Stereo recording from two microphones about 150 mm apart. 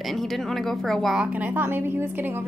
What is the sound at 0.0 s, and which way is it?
A woman's voice, centre (ahead or behind).